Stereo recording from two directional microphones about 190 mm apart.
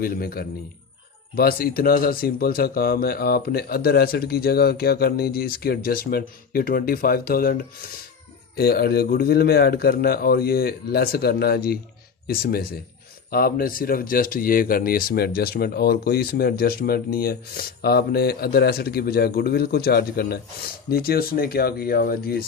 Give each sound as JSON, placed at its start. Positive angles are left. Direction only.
{"t": 0.0, "sound": "a man's voice", "side_deg": 50}